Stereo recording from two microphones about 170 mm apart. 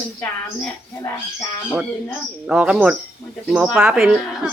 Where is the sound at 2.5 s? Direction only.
5° right (ahead or behind).